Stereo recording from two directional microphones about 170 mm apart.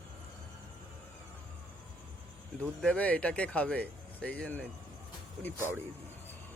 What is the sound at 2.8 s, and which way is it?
Speech, 10° left (ahead or behind).